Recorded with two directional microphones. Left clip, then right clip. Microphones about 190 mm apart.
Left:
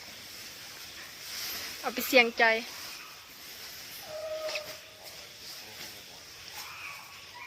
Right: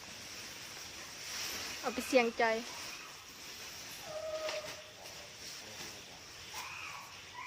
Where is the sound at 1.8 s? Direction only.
Centre (ahead or behind).